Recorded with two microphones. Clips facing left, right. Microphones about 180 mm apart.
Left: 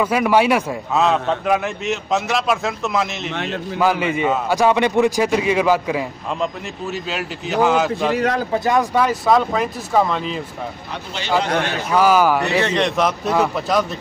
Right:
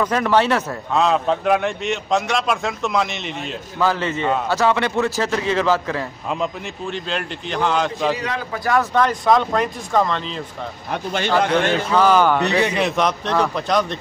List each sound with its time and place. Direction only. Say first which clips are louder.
0.0 s a man's voice: left 2 dB; 10° left (ahead or behind)
1.0 s a man's voice: right 1 dB; centre (ahead or behind)
3.7 s a man's voice: left 2 dB; 15° left (ahead or behind)
8.2 s speech: left 7 dB; 45° left (ahead or behind)
8.5 s speech: even; 20° left (ahead or behind)
8.9 s a man's voice: even; 5° left (ahead or behind)
11.9 s a man's voice: left 2 dB; 10° left (ahead or behind)
12.4 s a man's voice: even; 10° right (ahead or behind); by 13.9 s 5° left (ahead or behind)